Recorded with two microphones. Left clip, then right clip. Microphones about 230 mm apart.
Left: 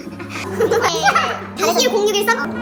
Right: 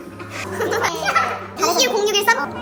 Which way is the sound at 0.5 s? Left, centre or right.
Centre.